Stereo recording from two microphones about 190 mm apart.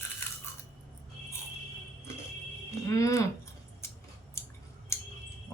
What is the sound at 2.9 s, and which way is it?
Speech, 15° left (ahead or behind).